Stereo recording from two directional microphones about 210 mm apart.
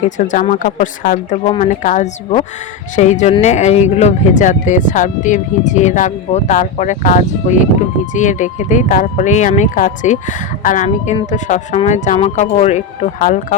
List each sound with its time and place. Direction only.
0.3 s speech: 35° left (ahead or behind)